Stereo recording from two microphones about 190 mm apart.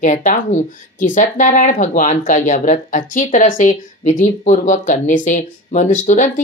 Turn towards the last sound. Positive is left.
turn(degrees=40)  # may be behind; listen again after turning